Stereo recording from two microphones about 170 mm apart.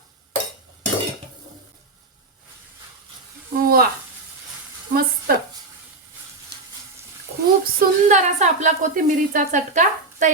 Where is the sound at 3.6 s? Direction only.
60° right (ahead or behind).